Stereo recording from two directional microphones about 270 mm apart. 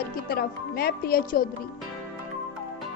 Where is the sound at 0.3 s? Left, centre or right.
Left.